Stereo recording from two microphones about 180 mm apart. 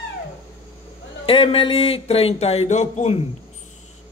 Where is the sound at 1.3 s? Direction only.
30° left (ahead or behind).